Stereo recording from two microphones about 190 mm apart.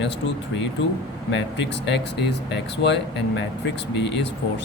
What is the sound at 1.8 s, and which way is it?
Speech, 65° left (ahead or behind).